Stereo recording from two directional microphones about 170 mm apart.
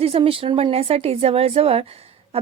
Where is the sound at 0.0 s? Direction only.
35° right (ahead or behind).